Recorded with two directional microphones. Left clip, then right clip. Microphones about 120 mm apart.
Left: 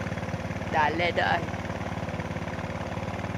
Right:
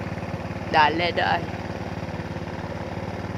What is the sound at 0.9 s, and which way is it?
Speech, 20° right (ahead or behind).